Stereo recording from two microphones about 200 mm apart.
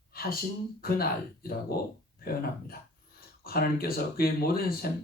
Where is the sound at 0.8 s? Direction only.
50° left (ahead or behind).